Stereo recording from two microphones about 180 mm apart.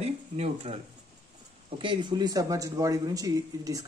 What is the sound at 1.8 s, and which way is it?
Speech, 25° right (ahead or behind).